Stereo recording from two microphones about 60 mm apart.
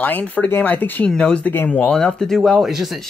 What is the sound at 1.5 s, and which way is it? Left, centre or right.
Speech, left.